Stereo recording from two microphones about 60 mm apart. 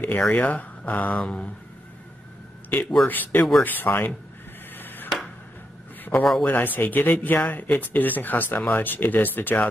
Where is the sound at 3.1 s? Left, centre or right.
Left.